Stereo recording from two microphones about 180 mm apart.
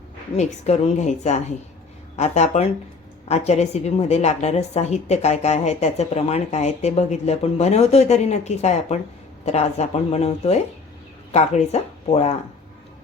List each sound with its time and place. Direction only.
0.3 s a woman's voice: 40° left (ahead or behind)